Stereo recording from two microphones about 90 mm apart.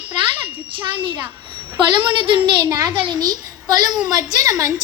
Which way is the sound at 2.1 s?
75° right (ahead or behind).